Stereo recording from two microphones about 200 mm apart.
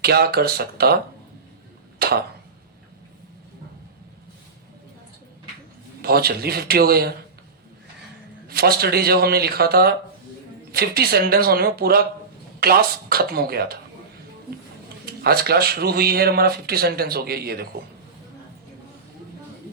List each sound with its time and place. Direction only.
0.0 s speech: 50° right (ahead or behind)
2.0 s a sound: 50° right (ahead or behind)
6.0 s speech: 50° right (ahead or behind)
8.4 s speech: 50° right (ahead or behind)
15.2 s speech: 50° right (ahead or behind)